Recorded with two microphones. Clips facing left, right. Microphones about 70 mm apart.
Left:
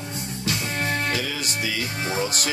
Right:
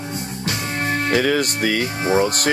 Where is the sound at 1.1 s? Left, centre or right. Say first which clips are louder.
Right 10 dB; right.